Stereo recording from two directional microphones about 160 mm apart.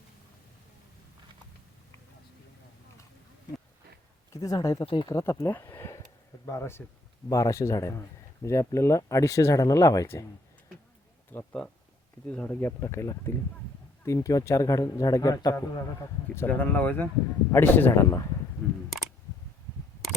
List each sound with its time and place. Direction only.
4.4 s speech: 20° left (ahead or behind)
11.3 s speech: 10° left (ahead or behind); by 15.8 s 25° left (ahead or behind)
16.3 s speech: 15° left (ahead or behind)